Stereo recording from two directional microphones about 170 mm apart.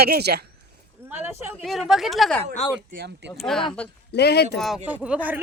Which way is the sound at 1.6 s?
Centre (ahead or behind).